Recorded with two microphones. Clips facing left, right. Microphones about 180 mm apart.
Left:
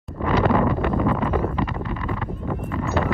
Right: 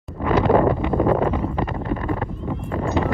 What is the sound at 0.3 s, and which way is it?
Wind noise, 35° right (ahead or behind).